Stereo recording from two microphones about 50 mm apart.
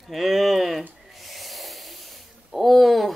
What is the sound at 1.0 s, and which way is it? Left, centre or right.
Snort, centre.